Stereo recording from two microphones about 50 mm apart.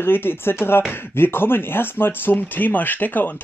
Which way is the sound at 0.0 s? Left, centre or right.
Left.